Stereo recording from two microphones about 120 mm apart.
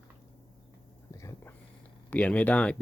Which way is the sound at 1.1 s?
25° left (ahead or behind).